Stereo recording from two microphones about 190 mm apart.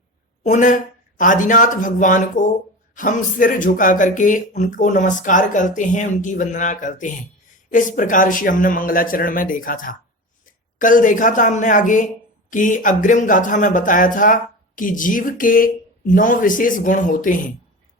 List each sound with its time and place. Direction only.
0.4 s speech: 40° left (ahead or behind)